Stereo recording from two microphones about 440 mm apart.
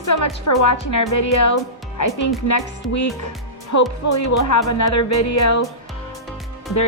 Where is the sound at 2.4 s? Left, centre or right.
Left.